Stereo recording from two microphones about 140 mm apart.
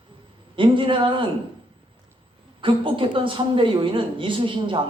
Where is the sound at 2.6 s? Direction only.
40° right (ahead or behind).